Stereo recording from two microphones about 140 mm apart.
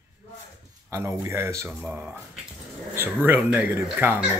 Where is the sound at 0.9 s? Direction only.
20° right (ahead or behind).